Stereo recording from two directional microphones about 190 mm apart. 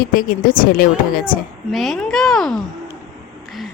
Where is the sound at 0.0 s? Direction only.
50° left (ahead or behind).